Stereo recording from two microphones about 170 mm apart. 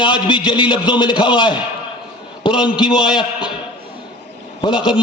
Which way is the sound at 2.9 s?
5° right (ahead or behind).